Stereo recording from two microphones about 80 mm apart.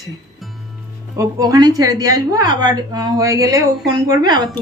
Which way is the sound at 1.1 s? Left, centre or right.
Right.